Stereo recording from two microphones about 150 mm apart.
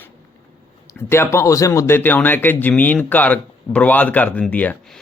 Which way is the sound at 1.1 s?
15° left (ahead or behind).